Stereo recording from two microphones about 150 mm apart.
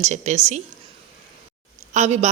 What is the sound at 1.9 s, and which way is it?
Speech, 50° right (ahead or behind).